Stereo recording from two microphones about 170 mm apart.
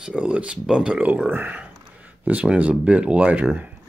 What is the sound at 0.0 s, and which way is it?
Speech, 5° right (ahead or behind).